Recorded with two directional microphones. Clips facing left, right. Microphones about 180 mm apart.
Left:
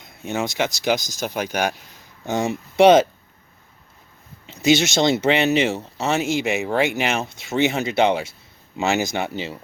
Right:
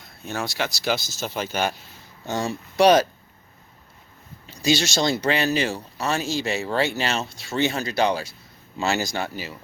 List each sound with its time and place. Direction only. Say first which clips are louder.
0.3 s speech: left 4 dB; 20° left (ahead or behind)
4.4 s speech: left 5 dB; 20° left (ahead or behind)